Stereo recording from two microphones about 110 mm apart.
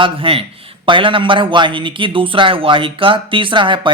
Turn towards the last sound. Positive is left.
turn(degrees=-45)  # may be behind; listen again after turning